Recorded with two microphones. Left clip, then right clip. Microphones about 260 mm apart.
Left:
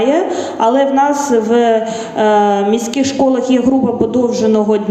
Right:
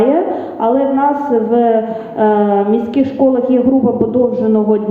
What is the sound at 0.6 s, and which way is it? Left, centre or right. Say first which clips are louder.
A man's voice: left 1 dB; left.